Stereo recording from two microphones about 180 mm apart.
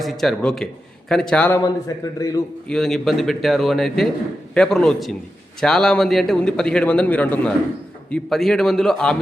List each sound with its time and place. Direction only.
0.0 s a man's voice: centre (ahead or behind); by 2.4 s 20° left (ahead or behind)
2.6 s a man's voice: centre (ahead or behind)